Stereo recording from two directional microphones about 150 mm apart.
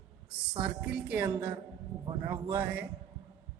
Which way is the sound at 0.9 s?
10° right (ahead or behind).